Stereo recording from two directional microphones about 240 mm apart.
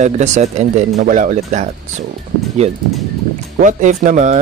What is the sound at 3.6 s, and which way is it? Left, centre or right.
Speech, right.